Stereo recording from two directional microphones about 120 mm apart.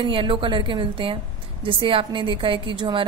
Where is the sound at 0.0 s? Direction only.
45° right (ahead or behind).